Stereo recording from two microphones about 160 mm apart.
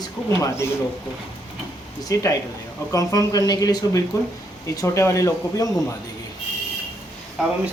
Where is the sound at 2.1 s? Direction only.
20° left (ahead or behind).